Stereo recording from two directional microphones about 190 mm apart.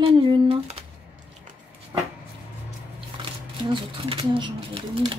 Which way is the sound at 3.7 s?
30° right (ahead or behind).